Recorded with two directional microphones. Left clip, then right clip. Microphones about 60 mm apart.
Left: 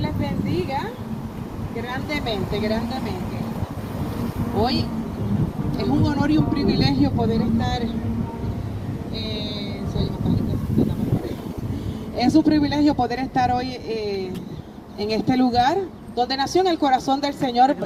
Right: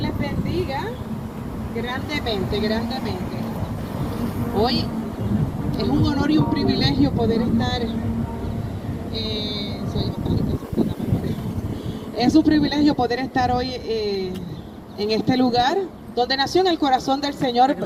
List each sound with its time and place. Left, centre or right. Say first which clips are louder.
2.2 s speech: right 3 dB; right
4.5 s speech: right 1 dB; right
7.6 s speech: right 1 dB; right
9.1 s vehicle: right 3 dB; right
12.1 s speech: right 1 dB; right